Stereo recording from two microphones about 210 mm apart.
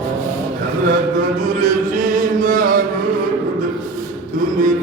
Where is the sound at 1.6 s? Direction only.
40° right (ahead or behind).